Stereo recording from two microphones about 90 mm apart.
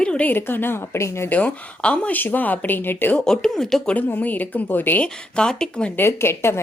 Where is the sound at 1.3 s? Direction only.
15° left (ahead or behind).